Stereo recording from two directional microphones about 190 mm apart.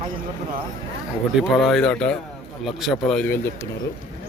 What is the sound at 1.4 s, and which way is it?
Speech, centre (ahead or behind).